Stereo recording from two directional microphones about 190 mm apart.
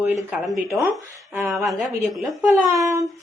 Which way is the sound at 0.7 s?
15° right (ahead or behind).